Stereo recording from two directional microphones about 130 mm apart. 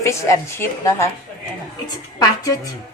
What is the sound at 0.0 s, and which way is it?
A woman's voice, 20° left (ahead or behind).